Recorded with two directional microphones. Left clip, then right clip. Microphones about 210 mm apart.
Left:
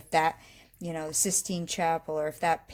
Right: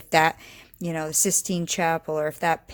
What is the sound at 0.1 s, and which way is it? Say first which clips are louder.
Speech: right 6 dB; 30° right (ahead or behind).